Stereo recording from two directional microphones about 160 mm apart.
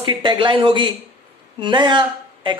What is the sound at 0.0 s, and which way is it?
A woman's voice, 30° right (ahead or behind).